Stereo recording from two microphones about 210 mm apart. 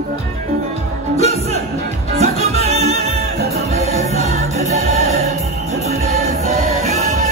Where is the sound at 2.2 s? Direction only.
30° right (ahead or behind).